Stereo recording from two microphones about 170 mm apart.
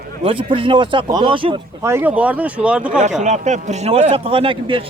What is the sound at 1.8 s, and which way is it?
Speech, 15° right (ahead or behind).